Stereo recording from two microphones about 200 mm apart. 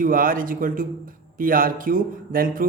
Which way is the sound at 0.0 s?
45° right (ahead or behind).